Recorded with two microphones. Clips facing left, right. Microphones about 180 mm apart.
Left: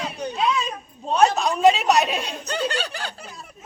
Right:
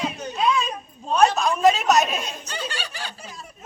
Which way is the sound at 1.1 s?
20° left (ahead or behind).